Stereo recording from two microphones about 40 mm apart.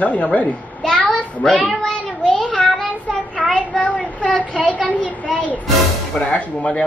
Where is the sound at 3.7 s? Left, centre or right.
Left.